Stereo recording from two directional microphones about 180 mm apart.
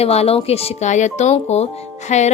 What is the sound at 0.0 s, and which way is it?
A woman's voice, 35° left (ahead or behind).